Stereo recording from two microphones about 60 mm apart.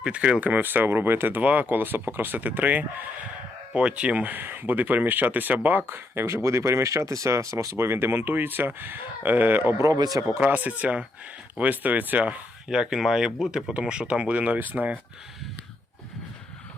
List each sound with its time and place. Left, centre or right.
0.0 s speech: centre; by 1.4 s right
1.4 s speech: right
9.7 s speech: right
10.4 s speech: right
12.6 s speech: centre; by 14.9 s right